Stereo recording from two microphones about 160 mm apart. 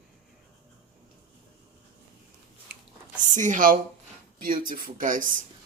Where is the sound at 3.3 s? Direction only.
50° right (ahead or behind).